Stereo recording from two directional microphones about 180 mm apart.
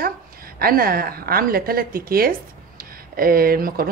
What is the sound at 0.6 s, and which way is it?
A woman's voice, 55° right (ahead or behind).